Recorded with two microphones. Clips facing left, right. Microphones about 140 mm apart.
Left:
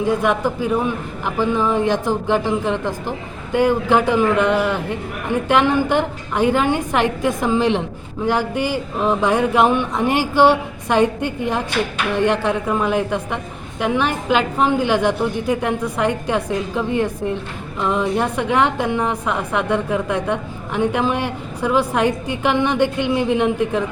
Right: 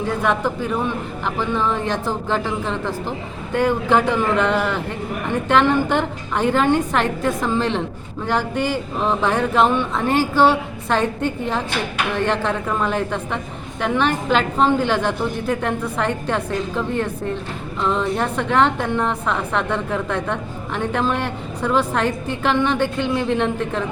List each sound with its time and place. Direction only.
0.0 s a woman's voice: 10° left (ahead or behind)